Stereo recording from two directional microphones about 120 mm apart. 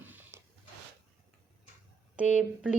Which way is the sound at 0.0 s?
15° right (ahead or behind).